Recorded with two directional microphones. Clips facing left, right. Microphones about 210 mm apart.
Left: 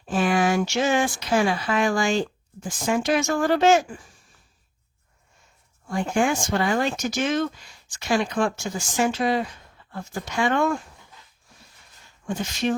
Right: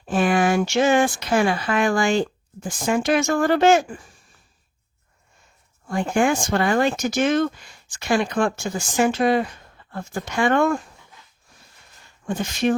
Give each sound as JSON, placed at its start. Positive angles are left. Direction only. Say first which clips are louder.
{"t": 0.1, "sound": "speech", "louder": "right 2 dB", "side_deg": -55}
{"t": 5.9, "sound": "speech", "louder": "right 3 dB", "side_deg": -55}
{"t": 12.2, "sound": "speech", "louder": "right 3 dB", "side_deg": -55}